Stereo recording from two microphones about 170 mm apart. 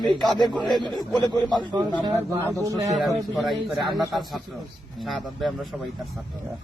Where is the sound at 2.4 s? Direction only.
15° left (ahead or behind).